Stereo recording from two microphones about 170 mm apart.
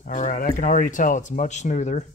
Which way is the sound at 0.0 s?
50° left (ahead or behind).